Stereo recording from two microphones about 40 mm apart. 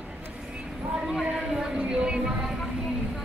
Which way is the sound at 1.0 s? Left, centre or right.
Centre.